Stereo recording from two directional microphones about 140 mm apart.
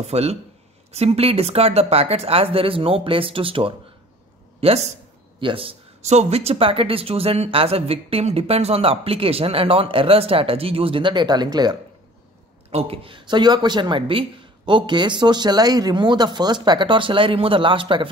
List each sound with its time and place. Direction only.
0.0 s speech: 50° right (ahead or behind); by 11.8 s 30° right (ahead or behind)
12.7 s speech: 40° right (ahead or behind)